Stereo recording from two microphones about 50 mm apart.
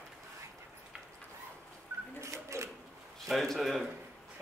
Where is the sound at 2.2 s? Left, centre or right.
Right.